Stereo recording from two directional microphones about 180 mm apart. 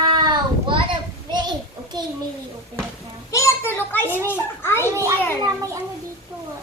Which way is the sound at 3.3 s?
15° left (ahead or behind).